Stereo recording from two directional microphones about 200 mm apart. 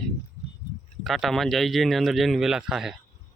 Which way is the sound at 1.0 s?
Centre (ahead or behind).